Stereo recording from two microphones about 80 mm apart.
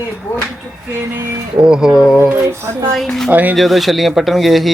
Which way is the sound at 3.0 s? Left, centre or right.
Centre.